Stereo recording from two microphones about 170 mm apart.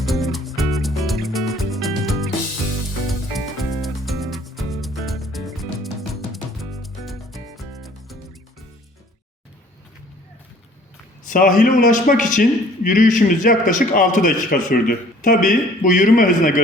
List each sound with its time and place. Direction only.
0.0 s music: centre (ahead or behind)
11.3 s a man's voice: 50° left (ahead or behind)